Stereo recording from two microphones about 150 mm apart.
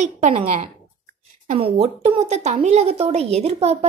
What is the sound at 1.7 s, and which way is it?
A woman's voice, 45° right (ahead or behind).